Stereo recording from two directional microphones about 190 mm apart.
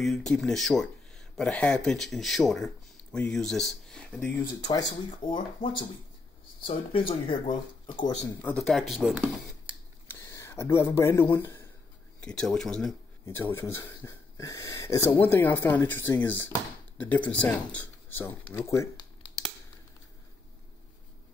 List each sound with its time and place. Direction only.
0.0 s speech: centre (ahead or behind)
4.6 s speech: 20° left (ahead or behind)
7.8 s a sound: 25° left (ahead or behind)
8.4 s speech: 5° left (ahead or behind)
10.0 s speech: 15° left (ahead or behind)